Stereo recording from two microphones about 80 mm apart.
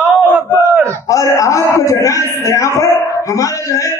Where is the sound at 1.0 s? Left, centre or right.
Left.